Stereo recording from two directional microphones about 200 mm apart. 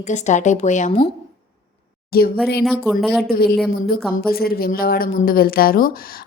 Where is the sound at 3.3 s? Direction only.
50° left (ahead or behind).